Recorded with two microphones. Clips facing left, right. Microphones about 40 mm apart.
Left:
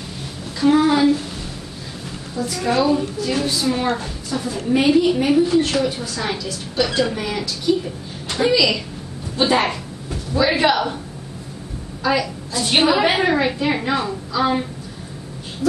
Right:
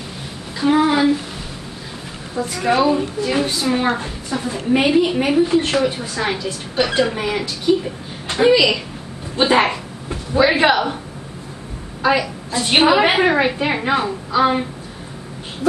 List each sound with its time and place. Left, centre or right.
0.6 s a woman's voice: centre
2.3 s a woman's voice: right
12.0 s a woman's voice: right